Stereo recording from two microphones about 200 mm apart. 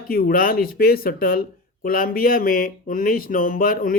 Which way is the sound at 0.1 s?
45° left (ahead or behind).